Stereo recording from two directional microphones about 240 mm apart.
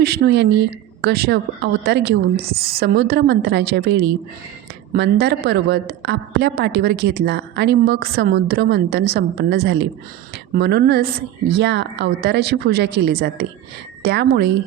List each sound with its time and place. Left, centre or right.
0.0 s a woman's voice: right